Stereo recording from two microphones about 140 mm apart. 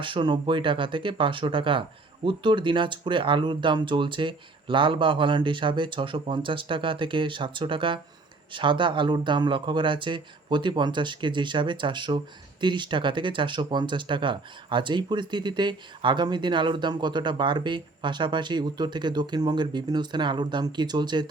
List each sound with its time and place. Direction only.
0.0 s speech: 35° right (ahead or behind)